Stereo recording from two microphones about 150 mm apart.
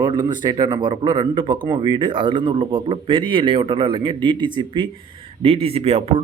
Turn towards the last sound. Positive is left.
turn(degrees=-40)  # may be behind; listen again after turning